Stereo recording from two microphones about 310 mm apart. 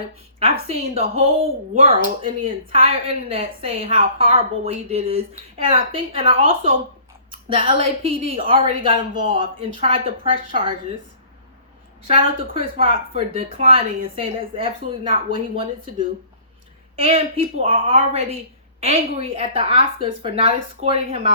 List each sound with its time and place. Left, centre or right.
0.3 s speech: centre
12.0 s speech: centre